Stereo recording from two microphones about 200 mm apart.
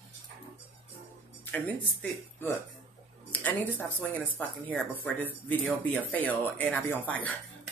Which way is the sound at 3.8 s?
10° left (ahead or behind).